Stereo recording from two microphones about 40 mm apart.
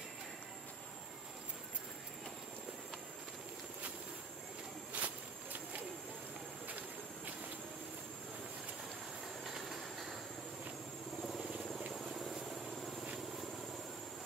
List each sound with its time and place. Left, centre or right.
5.0 s walk: right
9.4 s train: centre
11.9 s vehicle: centre